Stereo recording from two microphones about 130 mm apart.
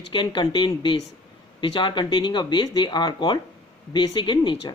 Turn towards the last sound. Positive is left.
turn(degrees=35)  # may be behind; listen again after turning